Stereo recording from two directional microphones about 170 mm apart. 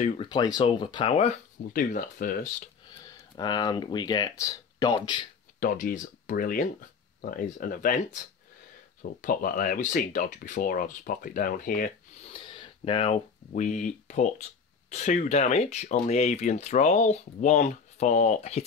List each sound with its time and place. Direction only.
0.2 s speech: 25° left (ahead or behind)
1.7 s speech: 55° left (ahead or behind)
3.3 s speech: 25° left (ahead or behind)
5.6 s speech: 55° left (ahead or behind)
9.2 s speech: 55° left (ahead or behind)
12.3 s a sound: 30° left (ahead or behind)
13.5 s speech: 45° left (ahead or behind)